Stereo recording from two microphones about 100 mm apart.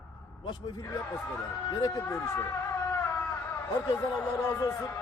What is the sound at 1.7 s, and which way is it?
Speech, 35° left (ahead or behind).